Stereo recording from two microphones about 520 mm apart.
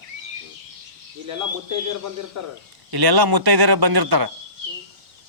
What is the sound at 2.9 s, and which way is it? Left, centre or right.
Speech, right.